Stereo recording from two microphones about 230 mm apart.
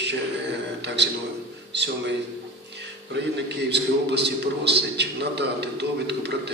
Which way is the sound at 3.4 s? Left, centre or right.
Right.